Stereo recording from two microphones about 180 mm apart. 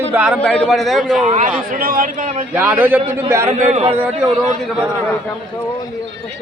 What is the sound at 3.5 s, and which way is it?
Speech, 40° right (ahead or behind).